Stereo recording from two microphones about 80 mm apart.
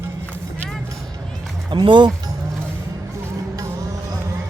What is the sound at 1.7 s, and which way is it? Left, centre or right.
Speech, right.